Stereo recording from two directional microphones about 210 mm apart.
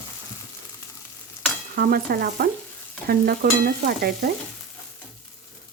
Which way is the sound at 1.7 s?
50° right (ahead or behind).